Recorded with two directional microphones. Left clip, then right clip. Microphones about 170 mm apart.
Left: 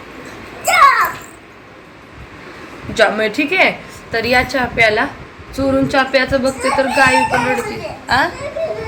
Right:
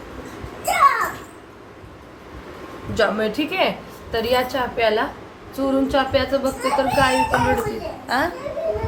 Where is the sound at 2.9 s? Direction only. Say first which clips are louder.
Left 6 dB; 20° left (ahead or behind).